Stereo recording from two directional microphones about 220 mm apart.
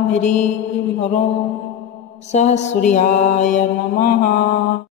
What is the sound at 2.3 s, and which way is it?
Mantra, 30° left (ahead or behind).